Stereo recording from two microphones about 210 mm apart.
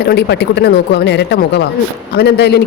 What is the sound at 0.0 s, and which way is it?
Speech, 50° left (ahead or behind).